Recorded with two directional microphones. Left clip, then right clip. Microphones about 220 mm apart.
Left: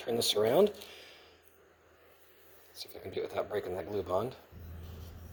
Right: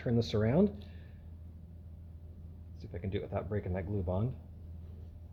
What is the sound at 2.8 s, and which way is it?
Speech, 45° left (ahead or behind).